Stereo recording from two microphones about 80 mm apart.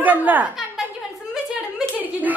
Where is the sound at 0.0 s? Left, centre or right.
Right.